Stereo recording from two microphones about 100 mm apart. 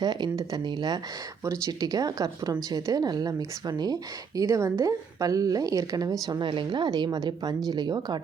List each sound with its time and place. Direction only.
0.0 s a woman's voice: 45° right (ahead or behind)
4.4 s speech: 30° right (ahead or behind)
6.4 s a woman's voice: 55° right (ahead or behind)